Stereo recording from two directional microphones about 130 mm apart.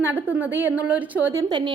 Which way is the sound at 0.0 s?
15° right (ahead or behind).